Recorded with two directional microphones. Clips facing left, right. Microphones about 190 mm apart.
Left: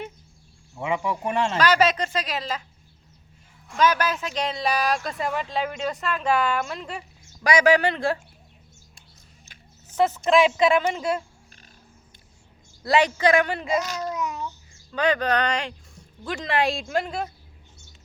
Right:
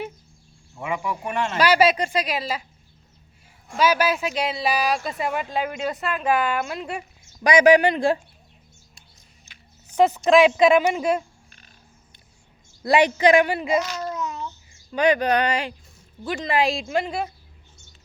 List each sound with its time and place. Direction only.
0.8 s speech: 20° left (ahead or behind)
1.5 s speech: 10° right (ahead or behind)
3.8 s speech: 10° right (ahead or behind)
9.9 s speech: 15° right (ahead or behind)
12.8 s speech: 15° right (ahead or behind)
14.1 s babbling: 15° left (ahead or behind)
14.9 s speech: 15° right (ahead or behind)